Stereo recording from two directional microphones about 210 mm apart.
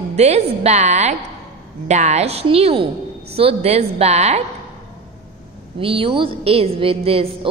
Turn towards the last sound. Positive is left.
turn(degrees=-30)  # may be behind; listen again after turning